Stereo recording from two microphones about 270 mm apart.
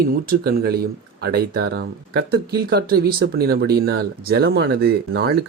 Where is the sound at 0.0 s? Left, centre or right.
Right.